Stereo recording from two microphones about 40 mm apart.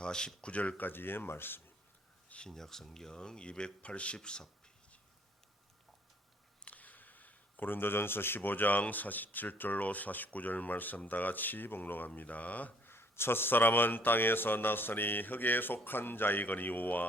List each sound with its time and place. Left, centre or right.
0.0 s speech: centre
0.4 s speech: left
0.8 s a man's voice: left
2.5 s a man's voice: centre
6.7 s a sound: left
8.4 s speech: left
12.8 s a man's voice: left